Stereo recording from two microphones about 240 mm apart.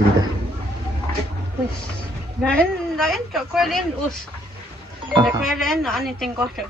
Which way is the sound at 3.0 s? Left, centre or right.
Centre.